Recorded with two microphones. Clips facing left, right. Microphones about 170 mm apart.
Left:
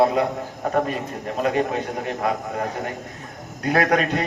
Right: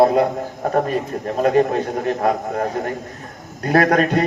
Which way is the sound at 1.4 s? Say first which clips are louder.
Right 6 dB; 35° right (ahead or behind).